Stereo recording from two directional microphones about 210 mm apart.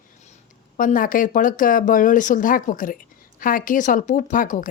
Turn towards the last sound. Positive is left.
turn(degrees=40)  # may be behind; listen again after turning